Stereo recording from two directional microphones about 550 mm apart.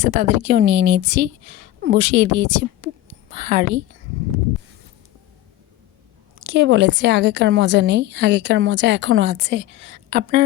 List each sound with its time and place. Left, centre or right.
0.0 s a woman's voice: centre
6.4 s a woman's voice: right